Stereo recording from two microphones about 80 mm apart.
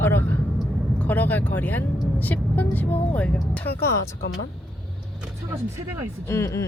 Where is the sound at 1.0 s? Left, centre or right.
Left.